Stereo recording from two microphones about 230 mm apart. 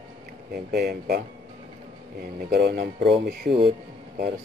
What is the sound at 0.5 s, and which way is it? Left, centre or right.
Speech, right.